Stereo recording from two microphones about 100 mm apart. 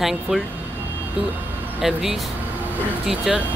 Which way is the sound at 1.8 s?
5° right (ahead or behind).